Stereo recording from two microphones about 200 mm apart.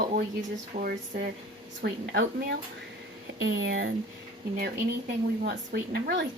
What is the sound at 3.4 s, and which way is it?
Speech, 75° right (ahead or behind).